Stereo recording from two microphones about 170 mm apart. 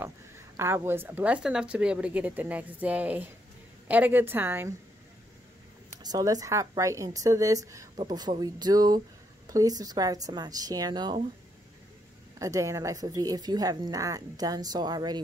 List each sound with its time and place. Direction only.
0.6 s a woman's voice: 15° right (ahead or behind)
6.0 s speech: 20° right (ahead or behind)
12.4 s speech: 20° right (ahead or behind)